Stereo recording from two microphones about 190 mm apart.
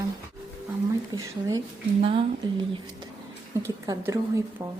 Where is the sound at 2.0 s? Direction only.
30° right (ahead or behind).